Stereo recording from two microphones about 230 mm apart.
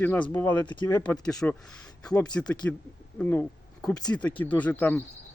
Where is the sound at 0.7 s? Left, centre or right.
Centre.